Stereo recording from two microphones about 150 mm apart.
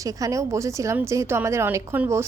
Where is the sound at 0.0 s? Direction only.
20° right (ahead or behind).